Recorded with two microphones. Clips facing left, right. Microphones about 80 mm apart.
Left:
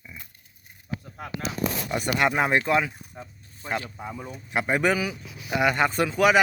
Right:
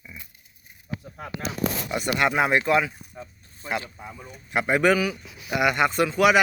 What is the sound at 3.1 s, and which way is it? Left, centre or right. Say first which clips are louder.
Speech: right 1 dB; centre.